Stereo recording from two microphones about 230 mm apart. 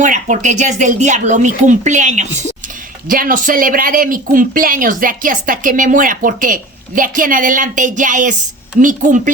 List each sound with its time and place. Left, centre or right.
0.0 s speech: right